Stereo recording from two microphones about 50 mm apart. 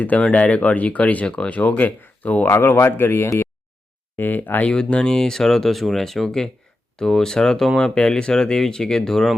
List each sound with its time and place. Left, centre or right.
0.0 s speech: left
2.5 s speech: left
4.6 s speech: left